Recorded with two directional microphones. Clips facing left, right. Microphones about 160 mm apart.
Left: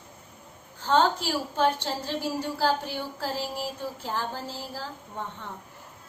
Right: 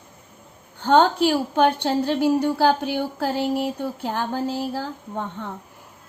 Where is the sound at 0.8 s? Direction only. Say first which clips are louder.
Right 7 dB; 65° right (ahead or behind).